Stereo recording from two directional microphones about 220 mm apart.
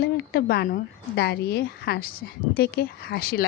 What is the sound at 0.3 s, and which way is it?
Speech, 45° left (ahead or behind).